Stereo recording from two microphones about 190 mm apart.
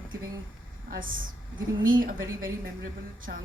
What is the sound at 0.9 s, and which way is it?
A man's voice, 45° right (ahead or behind).